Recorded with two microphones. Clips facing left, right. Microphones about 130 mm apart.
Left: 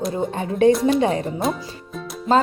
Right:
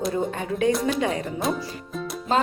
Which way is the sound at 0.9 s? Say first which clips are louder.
Left 5 dB; 30° left (ahead or behind).